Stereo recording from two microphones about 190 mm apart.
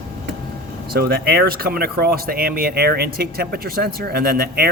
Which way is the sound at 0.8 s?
55° right (ahead or behind).